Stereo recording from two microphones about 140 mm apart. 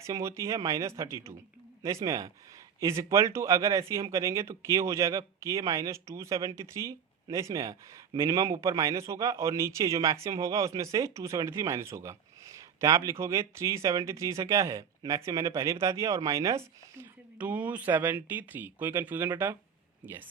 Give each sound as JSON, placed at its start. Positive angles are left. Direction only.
{"t": 0.0, "sound": "speech", "side_deg": -20}